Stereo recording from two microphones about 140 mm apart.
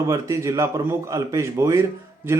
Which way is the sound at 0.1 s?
20° right (ahead or behind).